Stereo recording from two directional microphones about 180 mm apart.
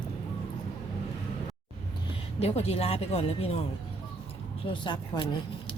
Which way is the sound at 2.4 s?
35° left (ahead or behind).